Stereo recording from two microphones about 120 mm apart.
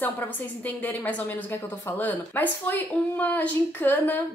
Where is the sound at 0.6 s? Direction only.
15° left (ahead or behind).